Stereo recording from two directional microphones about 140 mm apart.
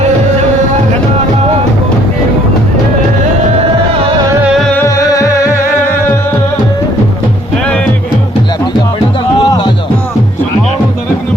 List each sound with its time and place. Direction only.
4.7 s music: 20° left (ahead or behind)
9.4 s music: 30° left (ahead or behind)